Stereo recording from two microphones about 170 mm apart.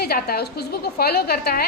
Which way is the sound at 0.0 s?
65° left (ahead or behind).